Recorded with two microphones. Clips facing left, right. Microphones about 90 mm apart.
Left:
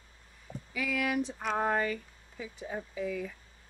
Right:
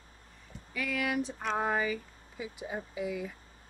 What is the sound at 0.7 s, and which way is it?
Speech, centre (ahead or behind).